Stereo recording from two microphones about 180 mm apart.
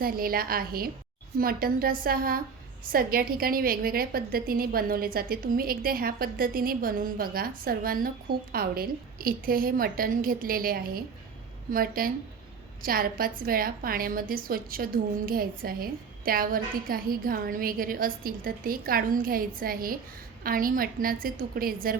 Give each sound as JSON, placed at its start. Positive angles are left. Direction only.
{"t": 0.0, "sound": "a woman's voice", "side_deg": -55}